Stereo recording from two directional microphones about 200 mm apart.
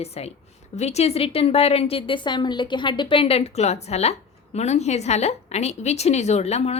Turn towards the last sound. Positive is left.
turn(degrees=30)  # may be behind; listen again after turning